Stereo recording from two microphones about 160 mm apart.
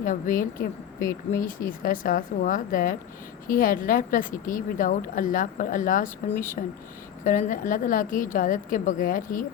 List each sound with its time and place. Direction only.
0.0 s a woman's voice: 55° left (ahead or behind)
0.9 s speech: 20° left (ahead or behind)
1.4 s a woman's voice: 60° left (ahead or behind)